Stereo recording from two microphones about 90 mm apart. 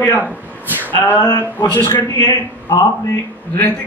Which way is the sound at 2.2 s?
45° left (ahead or behind).